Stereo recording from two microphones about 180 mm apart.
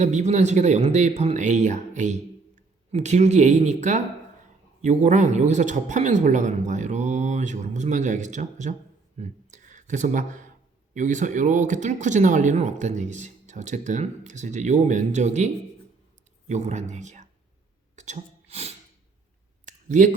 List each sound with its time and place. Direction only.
0.0 s speech: 40° right (ahead or behind)
17.9 s sneeze: 40° right (ahead or behind)
19.6 s a sound: 45° right (ahead or behind)